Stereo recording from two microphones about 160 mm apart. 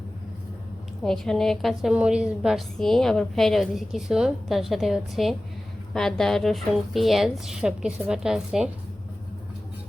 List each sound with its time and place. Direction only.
1.0 s a woman's voice: 5° left (ahead or behind)